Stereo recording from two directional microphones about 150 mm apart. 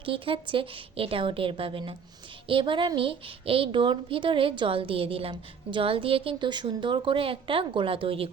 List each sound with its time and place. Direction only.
0.0 s a woman's voice: 35° right (ahead or behind)